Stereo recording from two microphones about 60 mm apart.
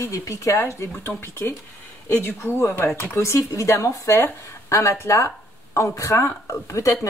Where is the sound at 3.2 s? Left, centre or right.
Left.